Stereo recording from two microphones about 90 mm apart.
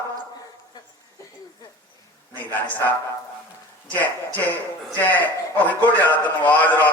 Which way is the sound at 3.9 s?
15° left (ahead or behind).